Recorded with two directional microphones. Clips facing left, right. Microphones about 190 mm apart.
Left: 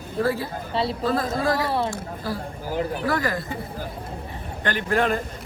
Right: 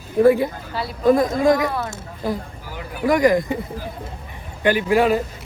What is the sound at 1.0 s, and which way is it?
Speech, 15° right (ahead or behind).